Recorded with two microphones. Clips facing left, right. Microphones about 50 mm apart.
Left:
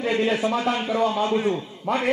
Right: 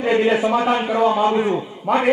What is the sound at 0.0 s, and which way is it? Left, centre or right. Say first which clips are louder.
A man's voice: right 5 dB; centre.